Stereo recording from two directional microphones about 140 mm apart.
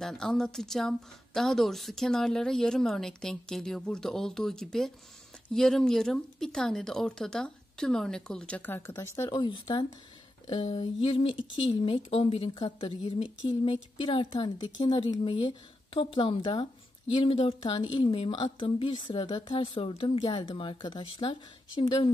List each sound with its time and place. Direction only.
0.0 s speech: 5° left (ahead or behind); by 9.3 s 20° left (ahead or behind)
9.3 s a woman's voice: 30° left (ahead or behind)
10.6 s a woman's voice: 45° left (ahead or behind)